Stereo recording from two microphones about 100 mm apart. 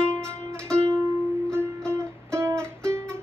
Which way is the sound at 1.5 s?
25° right (ahead or behind).